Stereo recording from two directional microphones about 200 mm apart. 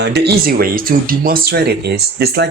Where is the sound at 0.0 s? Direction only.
55° right (ahead or behind).